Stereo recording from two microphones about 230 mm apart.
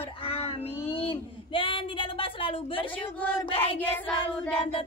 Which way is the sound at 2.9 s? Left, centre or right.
Centre.